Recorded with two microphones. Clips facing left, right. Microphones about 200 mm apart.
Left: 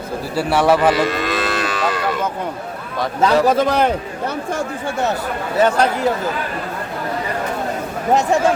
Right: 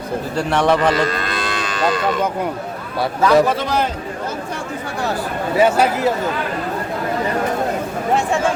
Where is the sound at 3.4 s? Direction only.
40° left (ahead or behind).